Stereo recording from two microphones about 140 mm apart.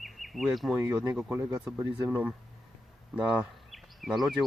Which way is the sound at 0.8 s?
15° right (ahead or behind).